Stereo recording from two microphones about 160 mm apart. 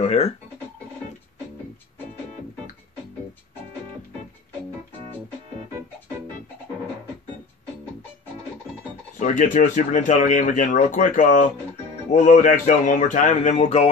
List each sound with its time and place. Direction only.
0.0 s speech: 45° left (ahead or behind)
9.1 s speech: 55° left (ahead or behind)